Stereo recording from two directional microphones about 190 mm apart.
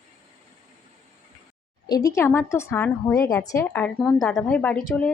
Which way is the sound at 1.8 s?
20° left (ahead or behind).